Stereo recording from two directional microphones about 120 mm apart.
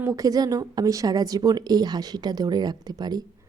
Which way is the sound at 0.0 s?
30° right (ahead or behind).